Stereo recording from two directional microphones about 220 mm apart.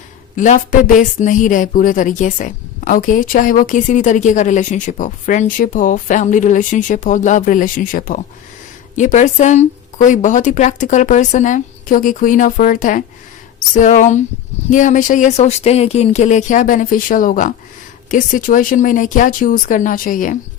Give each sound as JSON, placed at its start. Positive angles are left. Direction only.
{"t": 0.3, "sound": "speech", "side_deg": 35}